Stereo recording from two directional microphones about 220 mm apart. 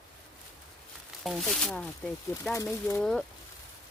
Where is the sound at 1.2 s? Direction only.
Centre (ahead or behind).